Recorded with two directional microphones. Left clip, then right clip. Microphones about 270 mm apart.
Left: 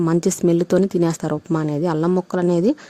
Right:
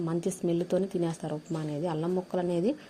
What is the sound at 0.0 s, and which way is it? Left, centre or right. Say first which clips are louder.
Speech: left 13 dB; left.